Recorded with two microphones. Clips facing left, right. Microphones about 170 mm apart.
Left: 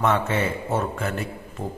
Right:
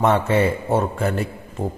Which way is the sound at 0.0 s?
35° right (ahead or behind).